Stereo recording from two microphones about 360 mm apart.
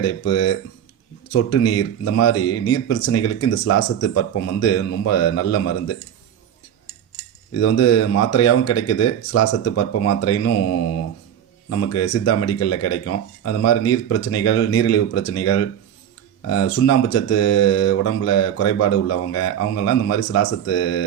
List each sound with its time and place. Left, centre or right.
0.0 s speech: left
7.5 s speech: left
11.7 s speech: left